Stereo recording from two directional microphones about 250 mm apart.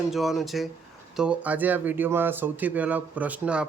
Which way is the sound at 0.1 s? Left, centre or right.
Centre.